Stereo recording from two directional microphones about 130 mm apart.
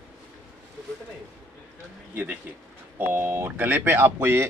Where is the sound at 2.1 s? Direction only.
15° right (ahead or behind).